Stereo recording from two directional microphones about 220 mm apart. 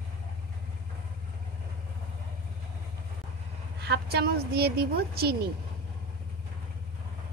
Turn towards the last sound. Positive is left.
turn(degrees=-45)  # may be behind; listen again after turning